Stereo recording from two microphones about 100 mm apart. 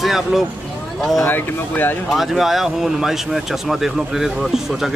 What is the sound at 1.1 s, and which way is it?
Speech, 25° left (ahead or behind).